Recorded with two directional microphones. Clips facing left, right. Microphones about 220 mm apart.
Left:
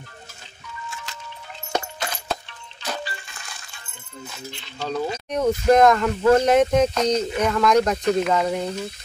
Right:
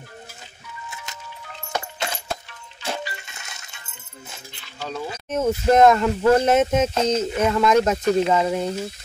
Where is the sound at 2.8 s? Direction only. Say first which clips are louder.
Right 1 dB; 25° right (ahead or behind).